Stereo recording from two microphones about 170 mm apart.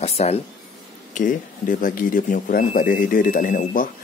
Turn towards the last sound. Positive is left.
turn(degrees=55)  # may be behind; listen again after turning